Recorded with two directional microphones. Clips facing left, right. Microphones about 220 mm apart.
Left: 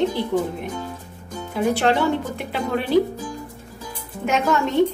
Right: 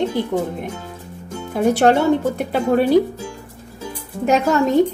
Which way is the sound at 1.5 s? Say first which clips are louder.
Right 5 dB; 45° right (ahead or behind).